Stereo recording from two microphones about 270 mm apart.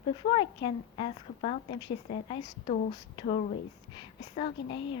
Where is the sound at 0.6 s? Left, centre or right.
Left.